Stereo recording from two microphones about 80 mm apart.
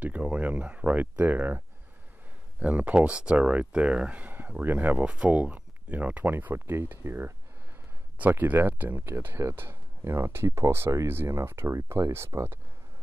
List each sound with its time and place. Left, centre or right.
0.0 s a sound: centre
2.6 s speech: centre; by 7.3 s right
8.2 s speech: right